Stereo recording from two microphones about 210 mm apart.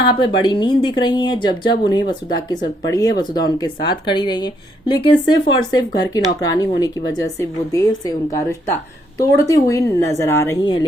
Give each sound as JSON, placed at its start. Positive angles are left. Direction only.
{"t": 0.1, "sound": "speech", "side_deg": 20}